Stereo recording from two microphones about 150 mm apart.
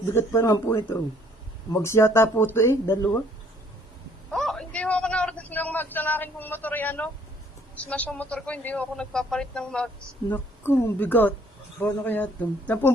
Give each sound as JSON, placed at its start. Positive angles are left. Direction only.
{"t": 0.1, "sound": "a man's voice", "side_deg": 15}
{"t": 4.3, "sound": "a sound", "side_deg": 5}
{"t": 7.8, "sound": "a man's voice", "side_deg": 10}